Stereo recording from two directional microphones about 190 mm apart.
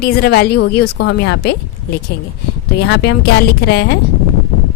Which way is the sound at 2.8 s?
60° left (ahead or behind).